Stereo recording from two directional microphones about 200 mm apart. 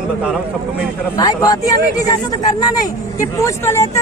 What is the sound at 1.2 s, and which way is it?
Speech, 20° left (ahead or behind).